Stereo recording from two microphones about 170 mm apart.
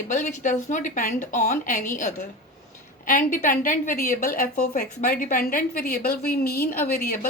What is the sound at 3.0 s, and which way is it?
A woman's voice, 50° left (ahead or behind).